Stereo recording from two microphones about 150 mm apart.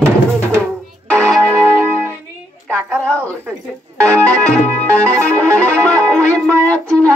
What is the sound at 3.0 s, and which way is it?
Music, 10° left (ahead or behind).